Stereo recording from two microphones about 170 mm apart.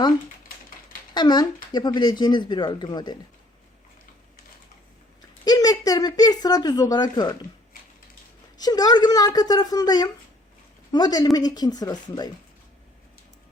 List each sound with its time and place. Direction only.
1.1 s a woman's voice: 25° left (ahead or behind)
5.5 s a sound: 20° left (ahead or behind)
8.5 s a woman's voice: 25° left (ahead or behind)